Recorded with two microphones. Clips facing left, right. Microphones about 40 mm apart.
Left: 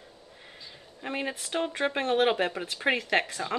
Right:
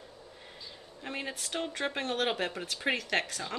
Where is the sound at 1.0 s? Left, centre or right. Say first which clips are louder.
Left 5 dB; centre.